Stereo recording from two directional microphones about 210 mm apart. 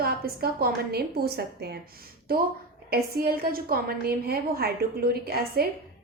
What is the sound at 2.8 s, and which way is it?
A woman's voice, 45° right (ahead or behind).